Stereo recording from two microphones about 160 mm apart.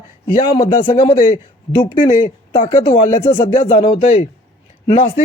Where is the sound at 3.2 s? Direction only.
30° left (ahead or behind).